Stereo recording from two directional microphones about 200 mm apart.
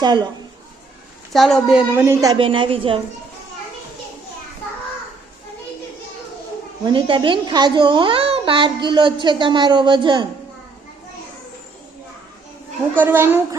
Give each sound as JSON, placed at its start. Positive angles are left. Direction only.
{"t": 0.0, "sound": "a woman's voice", "side_deg": -20}
{"t": 1.3, "sound": "a woman's voice", "side_deg": 0}
{"t": 2.0, "sound": "a child's voice", "side_deg": -10}
{"t": 2.3, "sound": "a woman's voice", "side_deg": -25}
{"t": 6.8, "sound": "a woman's voice", "side_deg": -25}
{"t": 13.0, "sound": "a child's voice", "side_deg": -10}